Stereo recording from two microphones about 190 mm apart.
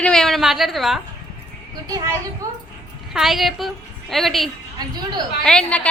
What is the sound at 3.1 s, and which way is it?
A woman's voice, centre (ahead or behind).